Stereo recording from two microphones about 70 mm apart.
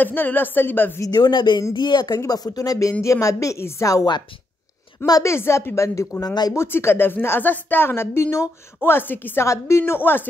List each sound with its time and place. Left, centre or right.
0.0 s a woman's voice: left
1.1 s speech: left
2.1 s speech: left
2.9 s a woman's voice: left
5.2 s a woman's voice: left
6.2 s speech: left
6.5 s a woman's voice: left
8.8 s a woman's voice: left
9.5 s a woman's voice: left